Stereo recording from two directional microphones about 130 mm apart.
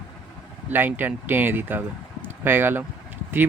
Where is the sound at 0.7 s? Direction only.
15° right (ahead or behind).